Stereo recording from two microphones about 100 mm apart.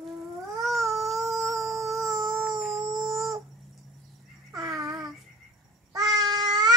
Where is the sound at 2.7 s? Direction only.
30° right (ahead or behind).